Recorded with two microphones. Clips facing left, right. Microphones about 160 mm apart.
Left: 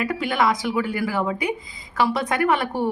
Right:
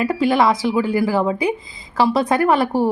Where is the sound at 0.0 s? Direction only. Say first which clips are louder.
Right 6 dB; 30° right (ahead or behind).